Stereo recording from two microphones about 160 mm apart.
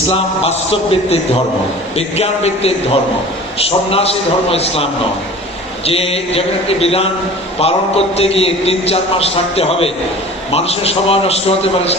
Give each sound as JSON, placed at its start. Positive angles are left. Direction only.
{"t": 0.1, "sound": "a man's voice", "side_deg": 35}